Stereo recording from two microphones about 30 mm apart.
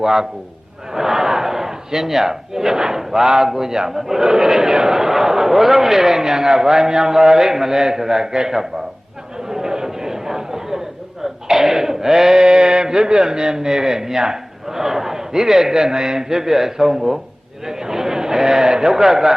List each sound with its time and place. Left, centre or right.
0.0 s a man's voice: centre
0.9 s battle cry: centre
3.5 s a man's voice: centre
9.5 s chatter: centre
11.2 s a sound: centre
12.4 s a man's voice: right